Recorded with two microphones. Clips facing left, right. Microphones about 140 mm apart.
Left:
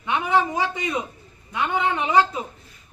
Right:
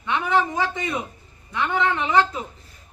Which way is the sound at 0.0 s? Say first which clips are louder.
Even; 15° left (ahead or behind).